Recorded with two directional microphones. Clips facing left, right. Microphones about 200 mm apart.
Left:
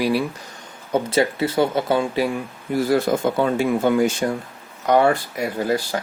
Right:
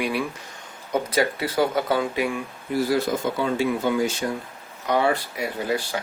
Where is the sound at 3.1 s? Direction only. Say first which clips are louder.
Left 5 dB; 55° left (ahead or behind).